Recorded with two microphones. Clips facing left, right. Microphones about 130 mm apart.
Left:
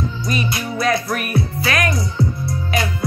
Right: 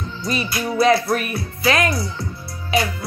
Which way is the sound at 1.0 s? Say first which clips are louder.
Left 1 dB; 30° right (ahead or behind).